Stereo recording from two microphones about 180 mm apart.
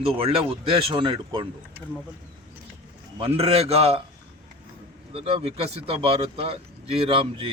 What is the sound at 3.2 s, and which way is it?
Speech, 35° right (ahead or behind).